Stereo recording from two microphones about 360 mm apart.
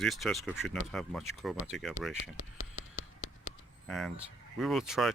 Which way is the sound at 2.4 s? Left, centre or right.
Left.